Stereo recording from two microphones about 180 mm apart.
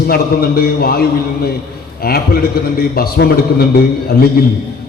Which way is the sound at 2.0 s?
55° left (ahead or behind).